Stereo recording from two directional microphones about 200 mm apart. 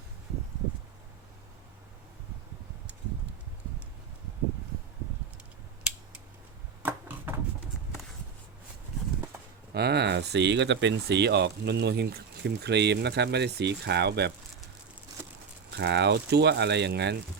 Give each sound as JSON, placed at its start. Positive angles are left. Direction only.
{"t": 6.8, "sound": "a sound", "side_deg": -10}
{"t": 9.7, "sound": "speech", "side_deg": -55}
{"t": 15.7, "sound": "speech", "side_deg": -60}